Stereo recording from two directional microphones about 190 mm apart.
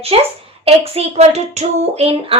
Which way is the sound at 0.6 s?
30° right (ahead or behind).